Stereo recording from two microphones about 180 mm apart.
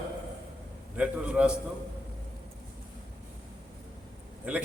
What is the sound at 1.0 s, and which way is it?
Speech, 5° right (ahead or behind).